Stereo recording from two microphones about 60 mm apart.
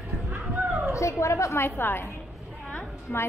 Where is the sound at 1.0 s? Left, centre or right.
Left.